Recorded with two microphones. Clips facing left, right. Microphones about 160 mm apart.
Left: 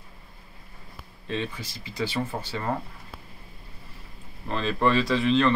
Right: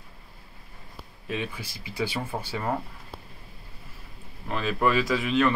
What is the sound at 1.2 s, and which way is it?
Speech, 10° right (ahead or behind).